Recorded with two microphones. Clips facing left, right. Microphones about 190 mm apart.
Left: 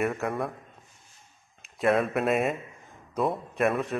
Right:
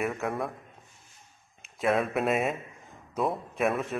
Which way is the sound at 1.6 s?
Centre (ahead or behind).